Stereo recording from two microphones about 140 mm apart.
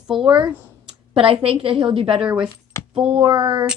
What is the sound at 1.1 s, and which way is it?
A woman's voice, 40° right (ahead or behind).